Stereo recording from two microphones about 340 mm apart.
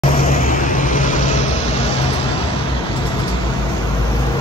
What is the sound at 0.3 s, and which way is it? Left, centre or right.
Vehicle, left.